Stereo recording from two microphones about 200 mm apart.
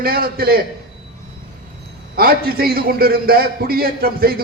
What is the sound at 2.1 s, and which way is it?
A man's voice, 50° right (ahead or behind).